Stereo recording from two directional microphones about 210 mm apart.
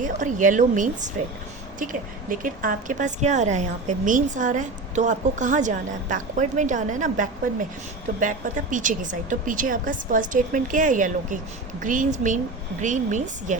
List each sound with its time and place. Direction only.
0.0 s a woman's voice: 35° right (ahead or behind)